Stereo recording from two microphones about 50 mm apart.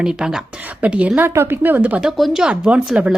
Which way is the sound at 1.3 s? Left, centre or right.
Right.